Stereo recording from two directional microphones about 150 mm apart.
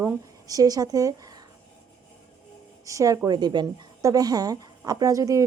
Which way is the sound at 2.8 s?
20° right (ahead or behind).